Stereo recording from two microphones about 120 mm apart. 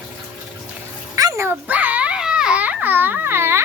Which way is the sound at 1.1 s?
25° right (ahead or behind).